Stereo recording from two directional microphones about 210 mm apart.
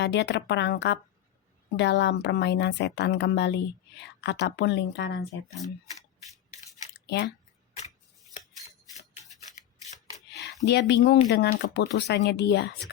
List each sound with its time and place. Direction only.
0.0 s a woman's voice: 55° left (ahead or behind)
10.3 s speech: 50° left (ahead or behind)